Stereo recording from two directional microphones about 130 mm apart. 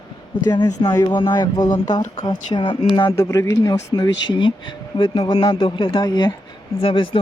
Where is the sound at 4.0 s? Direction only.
40° left (ahead or behind).